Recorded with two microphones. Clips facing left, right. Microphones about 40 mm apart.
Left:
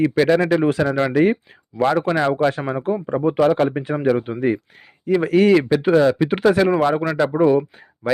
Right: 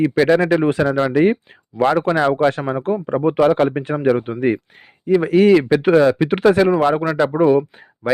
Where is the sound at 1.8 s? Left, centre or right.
Right.